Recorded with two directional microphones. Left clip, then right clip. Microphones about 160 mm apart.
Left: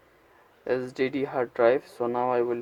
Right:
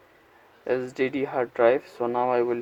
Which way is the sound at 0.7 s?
5° left (ahead or behind).